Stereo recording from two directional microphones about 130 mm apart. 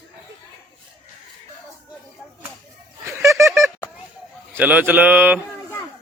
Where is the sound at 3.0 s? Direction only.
20° right (ahead or behind).